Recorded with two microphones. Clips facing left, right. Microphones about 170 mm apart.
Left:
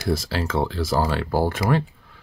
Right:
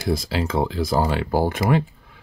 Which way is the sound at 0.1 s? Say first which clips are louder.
Right 1 dB; 15° right (ahead or behind).